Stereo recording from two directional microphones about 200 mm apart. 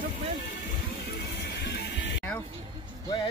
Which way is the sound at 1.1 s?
60° left (ahead or behind).